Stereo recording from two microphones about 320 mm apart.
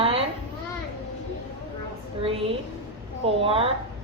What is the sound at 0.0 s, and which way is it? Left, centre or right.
Children playing, centre.